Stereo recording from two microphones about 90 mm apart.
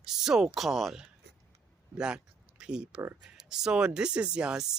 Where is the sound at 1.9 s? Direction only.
10° right (ahead or behind).